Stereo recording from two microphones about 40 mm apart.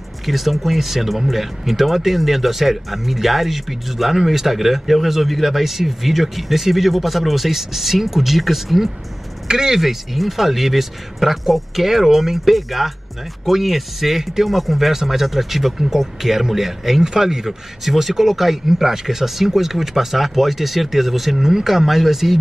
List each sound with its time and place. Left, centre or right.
0.2 s speech: centre
9.5 s speech: centre
9.8 s speech: centre